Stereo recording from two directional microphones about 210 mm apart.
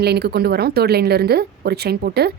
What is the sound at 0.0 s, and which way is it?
Speech, 50° right (ahead or behind).